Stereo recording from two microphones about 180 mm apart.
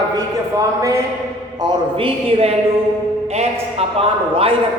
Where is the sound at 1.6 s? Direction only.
30° right (ahead or behind).